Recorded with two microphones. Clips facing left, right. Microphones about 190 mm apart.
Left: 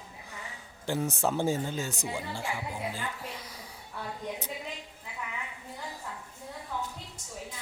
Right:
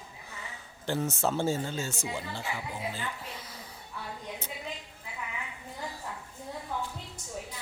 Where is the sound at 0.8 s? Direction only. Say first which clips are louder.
Even; 10° left (ahead or behind).